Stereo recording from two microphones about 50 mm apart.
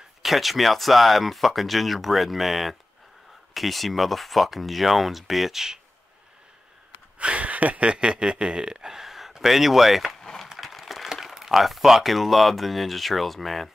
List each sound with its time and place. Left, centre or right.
0.2 s speech: centre
7.2 s speech: right; by 10.1 s centre
10.6 s a sound: centre
11.1 s speech: centre